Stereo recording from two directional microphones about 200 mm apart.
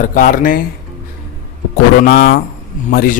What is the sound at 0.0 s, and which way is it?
Speech, 40° left (ahead or behind).